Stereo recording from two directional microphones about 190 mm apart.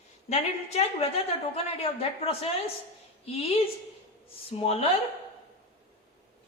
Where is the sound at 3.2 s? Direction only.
30° left (ahead or behind).